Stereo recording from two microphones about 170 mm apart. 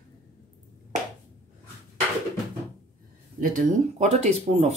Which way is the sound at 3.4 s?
50° right (ahead or behind).